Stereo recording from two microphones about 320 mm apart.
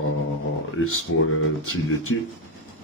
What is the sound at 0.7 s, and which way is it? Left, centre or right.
Speech, left.